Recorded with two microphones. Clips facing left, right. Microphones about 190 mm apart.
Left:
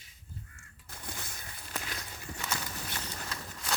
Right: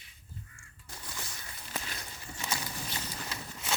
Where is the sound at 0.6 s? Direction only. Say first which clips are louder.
Even; 55° left (ahead or behind).